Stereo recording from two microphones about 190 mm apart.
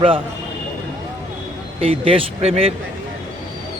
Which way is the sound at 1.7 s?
30° right (ahead or behind).